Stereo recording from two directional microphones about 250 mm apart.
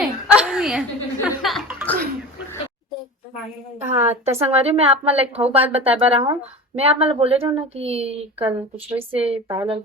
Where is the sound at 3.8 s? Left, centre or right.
Right.